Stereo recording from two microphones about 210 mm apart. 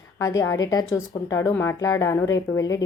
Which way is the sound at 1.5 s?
10° left (ahead or behind).